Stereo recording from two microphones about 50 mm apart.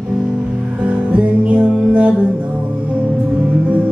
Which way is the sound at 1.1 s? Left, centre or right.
Right.